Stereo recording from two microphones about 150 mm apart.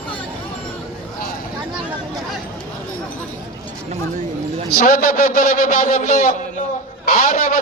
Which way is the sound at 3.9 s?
45° right (ahead or behind).